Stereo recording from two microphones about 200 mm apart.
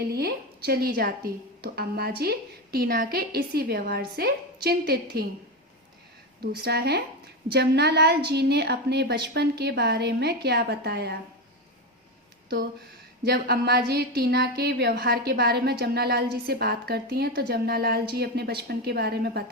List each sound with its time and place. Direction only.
0.1 s a woman's voice: 50° right (ahead or behind)
6.4 s a woman's voice: 55° right (ahead or behind)
13.2 s a woman's voice: 50° right (ahead or behind)